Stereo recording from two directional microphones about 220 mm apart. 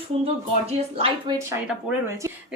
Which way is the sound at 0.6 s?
25° right (ahead or behind).